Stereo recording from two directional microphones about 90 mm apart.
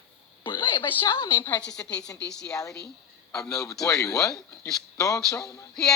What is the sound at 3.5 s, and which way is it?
Speech, 5° left (ahead or behind).